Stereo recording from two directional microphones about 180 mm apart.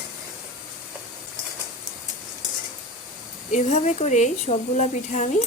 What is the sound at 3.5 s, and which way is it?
A woman's voice, 40° left (ahead or behind).